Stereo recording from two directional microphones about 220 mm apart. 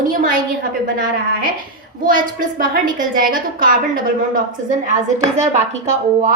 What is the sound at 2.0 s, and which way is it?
A woman's voice, 40° right (ahead or behind).